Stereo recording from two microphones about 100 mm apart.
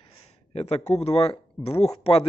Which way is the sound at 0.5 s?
90° left.